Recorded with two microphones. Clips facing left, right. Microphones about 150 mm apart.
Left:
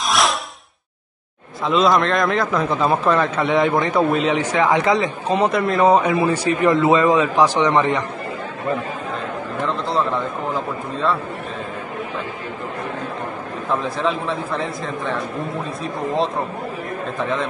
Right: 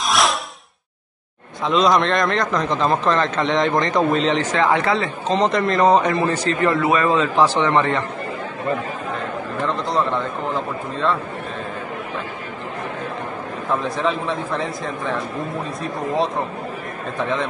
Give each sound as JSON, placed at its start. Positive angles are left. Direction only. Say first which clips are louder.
{"t": 0.0, "sound": "whoosh", "louder": "even", "side_deg": 0}
{"t": 1.7, "sound": "a man's voice", "louder": "even", "side_deg": 0}
{"t": 9.7, "sound": "a man's voice", "louder": "even", "side_deg": 0}
{"t": 13.7, "sound": "a man's voice", "louder": "even", "side_deg": 0}